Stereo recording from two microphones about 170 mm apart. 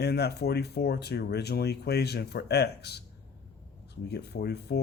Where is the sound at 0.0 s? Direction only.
70° left (ahead or behind).